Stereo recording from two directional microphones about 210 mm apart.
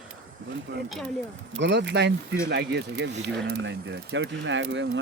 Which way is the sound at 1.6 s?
55° right (ahead or behind).